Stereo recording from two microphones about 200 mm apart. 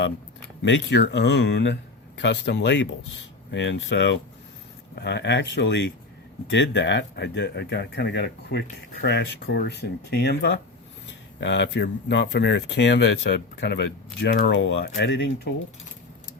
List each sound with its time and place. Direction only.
0.6 s speech: 65° left (ahead or behind)